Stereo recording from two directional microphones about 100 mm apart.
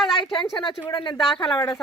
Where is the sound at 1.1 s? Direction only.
5° left (ahead or behind).